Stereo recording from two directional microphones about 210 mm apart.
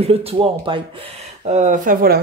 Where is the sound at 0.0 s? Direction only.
30° right (ahead or behind).